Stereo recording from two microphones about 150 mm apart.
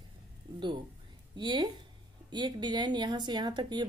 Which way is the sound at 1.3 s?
30° right (ahead or behind).